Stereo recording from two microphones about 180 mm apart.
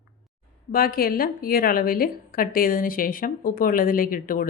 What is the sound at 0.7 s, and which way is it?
Speech, 55° left (ahead or behind).